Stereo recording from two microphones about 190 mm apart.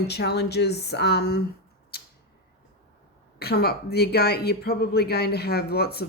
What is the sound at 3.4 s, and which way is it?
Speech, 55° left (ahead or behind).